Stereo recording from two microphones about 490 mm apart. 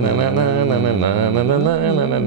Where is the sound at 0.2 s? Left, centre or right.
Right.